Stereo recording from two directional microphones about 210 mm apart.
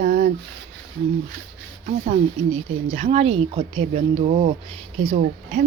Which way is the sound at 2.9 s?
30° right (ahead or behind).